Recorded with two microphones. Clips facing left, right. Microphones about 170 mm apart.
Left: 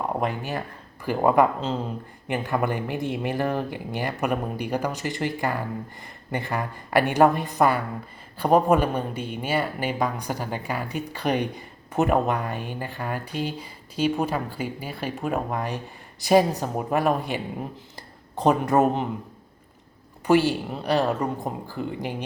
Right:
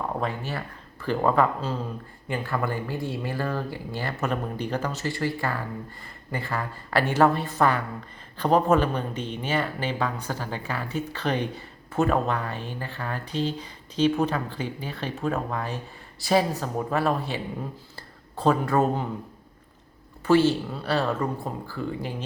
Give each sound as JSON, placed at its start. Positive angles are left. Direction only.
{"t": 0.2, "sound": "speech", "side_deg": 15}
{"t": 20.2, "sound": "speech", "side_deg": 15}